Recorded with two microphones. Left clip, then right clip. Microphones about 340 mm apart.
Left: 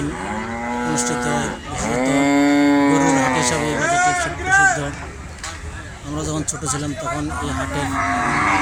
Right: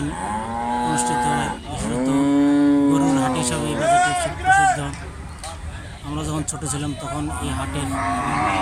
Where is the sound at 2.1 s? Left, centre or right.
Centre.